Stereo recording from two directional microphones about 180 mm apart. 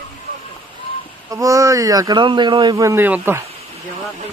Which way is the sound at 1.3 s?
15° right (ahead or behind).